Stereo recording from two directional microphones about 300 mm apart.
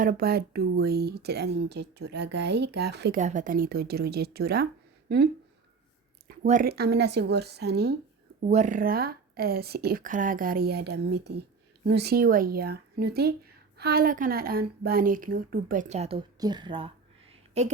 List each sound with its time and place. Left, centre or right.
0.0 s speech: right
8.4 s a woman's voice: right